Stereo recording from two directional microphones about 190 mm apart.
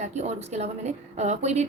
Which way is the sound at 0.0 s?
35° right (ahead or behind).